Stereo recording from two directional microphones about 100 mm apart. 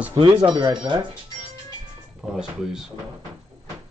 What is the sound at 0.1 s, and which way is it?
Speech, 55° right (ahead or behind).